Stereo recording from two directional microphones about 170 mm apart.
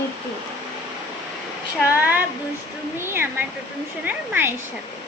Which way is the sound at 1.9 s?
10° right (ahead or behind).